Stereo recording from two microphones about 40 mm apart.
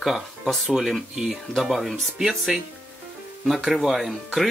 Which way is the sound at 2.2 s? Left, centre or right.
Centre.